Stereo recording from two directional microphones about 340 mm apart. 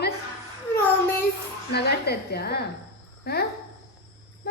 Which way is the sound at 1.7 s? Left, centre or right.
Left.